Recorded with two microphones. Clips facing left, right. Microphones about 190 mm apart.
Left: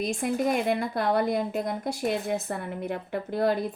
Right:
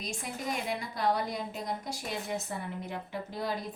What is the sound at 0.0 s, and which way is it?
A woman's voice, 55° left (ahead or behind).